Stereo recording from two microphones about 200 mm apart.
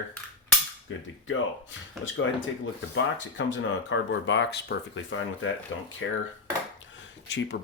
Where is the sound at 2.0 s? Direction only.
70° left (ahead or behind).